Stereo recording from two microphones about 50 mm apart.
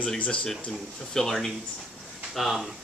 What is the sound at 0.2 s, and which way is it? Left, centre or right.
Speech, left.